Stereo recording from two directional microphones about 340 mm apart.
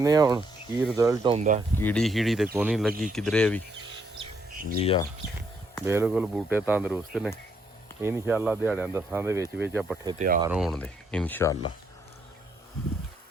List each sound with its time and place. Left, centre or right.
0.0 s speech: centre
1.7 s speech: centre
4.8 s speech: centre
5.8 s speech: centre